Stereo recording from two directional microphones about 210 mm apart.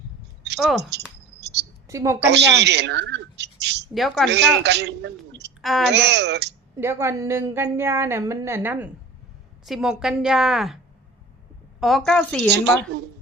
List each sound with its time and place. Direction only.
0.8 s speech: 55° right (ahead or behind)
1.9 s a woman's voice: 15° right (ahead or behind)
2.2 s a woman's voice: 55° right (ahead or behind)
3.9 s a woman's voice: centre (ahead or behind)
4.3 s a woman's voice: 55° right (ahead or behind)
5.6 s a woman's voice: centre (ahead or behind)
5.9 s speech: 55° right (ahead or behind)
6.7 s a woman's voice: 10° right (ahead or behind)
11.8 s a woman's voice: centre (ahead or behind)
12.5 s speech: 55° right (ahead or behind)